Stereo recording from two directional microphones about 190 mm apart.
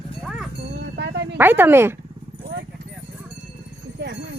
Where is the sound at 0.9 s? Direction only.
65° right (ahead or behind).